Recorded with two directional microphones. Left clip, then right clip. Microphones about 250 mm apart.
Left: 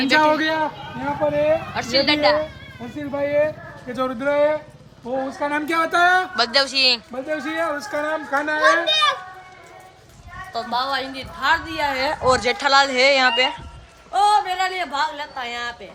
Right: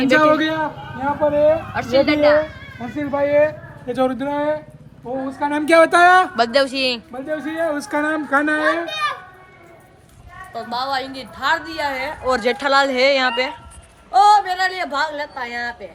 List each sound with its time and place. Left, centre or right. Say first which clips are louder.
0.0 s speech: right 2 dB; centre
5.4 s speech: right 4 dB; centre
5.6 s speech: right 7 dB; centre
7.9 s a woman's voice: right 3 dB; right
8.6 s a child's voice: left 4 dB; left
10.5 s speech: even; centre